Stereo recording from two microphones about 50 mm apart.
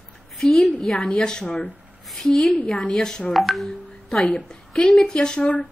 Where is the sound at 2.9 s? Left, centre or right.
Centre.